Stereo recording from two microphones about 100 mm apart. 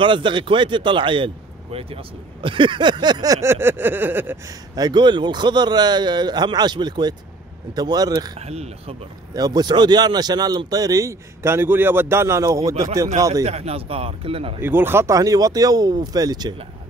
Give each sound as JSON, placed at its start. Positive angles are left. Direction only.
{"t": 0.0, "sound": "a man's voice", "side_deg": -55}
{"t": 3.4, "sound": "a sound", "side_deg": -25}
{"t": 4.5, "sound": "a man's voice", "side_deg": -45}
{"t": 8.4, "sound": "speech", "side_deg": -90}
{"t": 9.3, "sound": "a man's voice", "side_deg": -40}
{"t": 13.3, "sound": "speech", "side_deg": -90}
{"t": 14.6, "sound": "a man's voice", "side_deg": -20}